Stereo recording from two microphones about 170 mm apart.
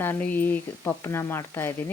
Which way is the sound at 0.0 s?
10° left (ahead or behind).